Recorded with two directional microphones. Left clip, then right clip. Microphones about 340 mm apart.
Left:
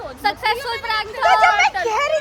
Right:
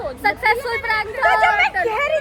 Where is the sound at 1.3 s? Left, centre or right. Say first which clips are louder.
Left 2 dB; centre.